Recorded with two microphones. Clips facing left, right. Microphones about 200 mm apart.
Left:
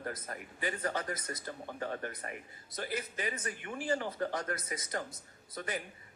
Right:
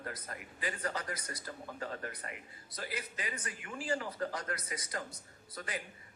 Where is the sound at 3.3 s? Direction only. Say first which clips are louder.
Left 4 dB; 30° left (ahead or behind).